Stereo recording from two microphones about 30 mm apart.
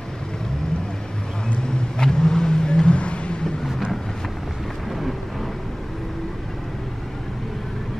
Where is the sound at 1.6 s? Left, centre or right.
Left.